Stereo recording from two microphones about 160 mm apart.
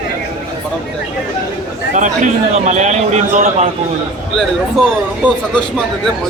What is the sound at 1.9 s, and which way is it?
A man's voice, 50° right (ahead or behind).